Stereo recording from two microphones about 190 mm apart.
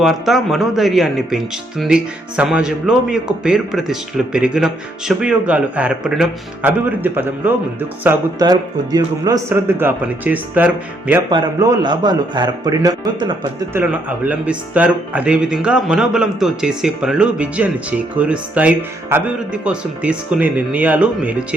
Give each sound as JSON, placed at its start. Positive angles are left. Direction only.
{"t": 0.0, "sound": "speech", "side_deg": 0}
{"t": 11.3, "sound": "a man's voice", "side_deg": -20}
{"t": 14.3, "sound": "speech", "side_deg": -10}